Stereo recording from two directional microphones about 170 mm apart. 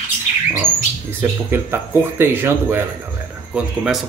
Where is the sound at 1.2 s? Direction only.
10° right (ahead or behind).